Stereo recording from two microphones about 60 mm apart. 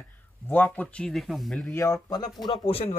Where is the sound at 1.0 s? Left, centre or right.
Centre.